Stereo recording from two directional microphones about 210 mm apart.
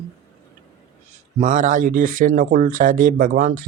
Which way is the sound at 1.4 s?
35° right (ahead or behind).